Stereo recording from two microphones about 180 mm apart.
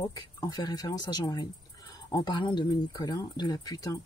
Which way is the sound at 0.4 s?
20° left (ahead or behind).